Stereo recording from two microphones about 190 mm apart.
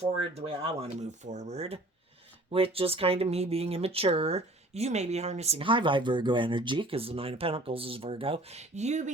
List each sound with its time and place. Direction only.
0.0 s speech: 30° right (ahead or behind)